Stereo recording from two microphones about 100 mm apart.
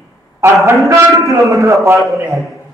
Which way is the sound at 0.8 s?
30° right (ahead or behind).